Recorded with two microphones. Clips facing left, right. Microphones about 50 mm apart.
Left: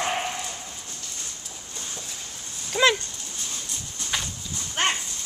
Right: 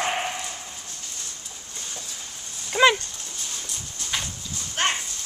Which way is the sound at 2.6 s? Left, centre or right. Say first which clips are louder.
Right 3 dB; centre.